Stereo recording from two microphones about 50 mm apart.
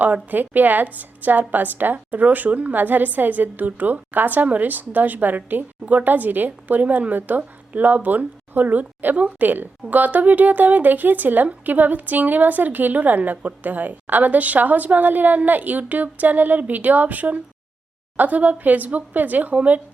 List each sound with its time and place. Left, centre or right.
0.0 s a woman's voice: right